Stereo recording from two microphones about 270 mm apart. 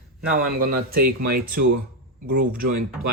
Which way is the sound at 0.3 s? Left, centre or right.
Right.